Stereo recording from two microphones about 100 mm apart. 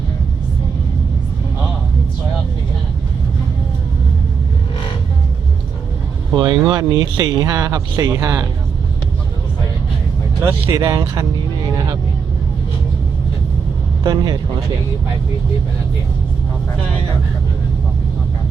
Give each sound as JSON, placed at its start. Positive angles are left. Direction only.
{"t": 6.3, "sound": "speech", "side_deg": -50}
{"t": 10.4, "sound": "speech", "side_deg": -25}
{"t": 14.0, "sound": "speech", "side_deg": -40}